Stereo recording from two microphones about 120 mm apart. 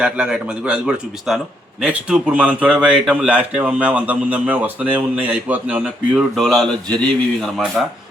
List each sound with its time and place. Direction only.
0.0 s a man's voice: 5° right (ahead or behind)